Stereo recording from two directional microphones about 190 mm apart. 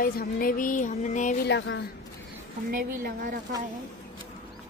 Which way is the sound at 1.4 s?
65° left (ahead or behind).